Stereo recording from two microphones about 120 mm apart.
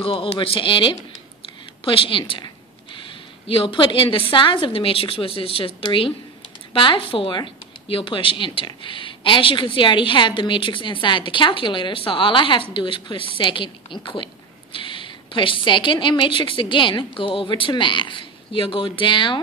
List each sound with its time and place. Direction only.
0.0 s speech: 45° left (ahead or behind)
1.9 s a sound: 45° left (ahead or behind)
3.4 s speech: 45° left (ahead or behind)